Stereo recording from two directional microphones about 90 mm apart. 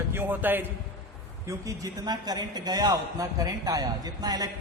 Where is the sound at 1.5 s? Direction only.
40° right (ahead or behind).